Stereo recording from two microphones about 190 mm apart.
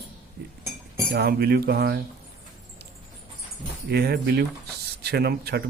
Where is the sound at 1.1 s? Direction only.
60° right (ahead or behind).